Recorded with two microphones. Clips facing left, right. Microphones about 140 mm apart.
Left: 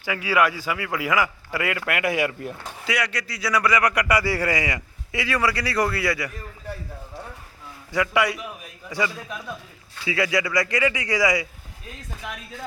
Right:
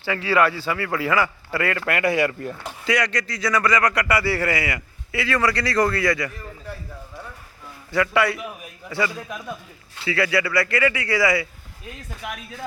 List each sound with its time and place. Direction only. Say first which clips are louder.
0.0 s speech: right 2 dB; 10° left (ahead or behind)
7.9 s speech: right 2 dB; 15° left (ahead or behind)